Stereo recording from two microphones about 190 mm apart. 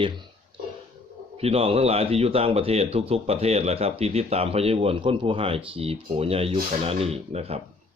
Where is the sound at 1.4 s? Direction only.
30° right (ahead or behind).